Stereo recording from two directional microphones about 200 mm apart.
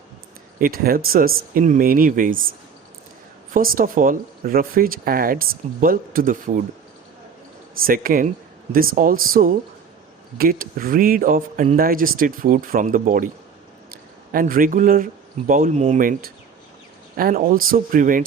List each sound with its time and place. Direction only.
0.6 s speech: 45° right (ahead or behind)
3.5 s speech: 45° right (ahead or behind)
7.9 s speech: 45° right (ahead or behind)
14.3 s speech: 45° right (ahead or behind)